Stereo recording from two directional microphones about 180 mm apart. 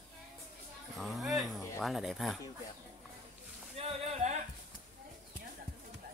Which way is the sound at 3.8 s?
35° right (ahead or behind).